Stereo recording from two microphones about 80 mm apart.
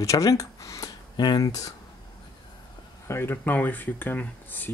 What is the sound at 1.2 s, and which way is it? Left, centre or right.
Speech, left.